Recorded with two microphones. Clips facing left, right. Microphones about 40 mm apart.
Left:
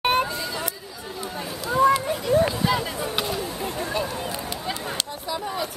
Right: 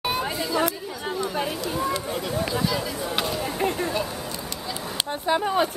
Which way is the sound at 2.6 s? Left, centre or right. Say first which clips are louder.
Left 2 dB; left.